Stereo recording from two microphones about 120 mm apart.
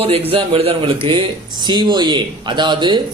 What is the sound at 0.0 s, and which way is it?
Speech, 55° right (ahead or behind).